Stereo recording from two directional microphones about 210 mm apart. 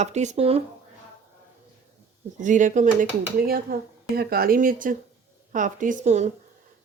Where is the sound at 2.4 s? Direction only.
35° right (ahead or behind).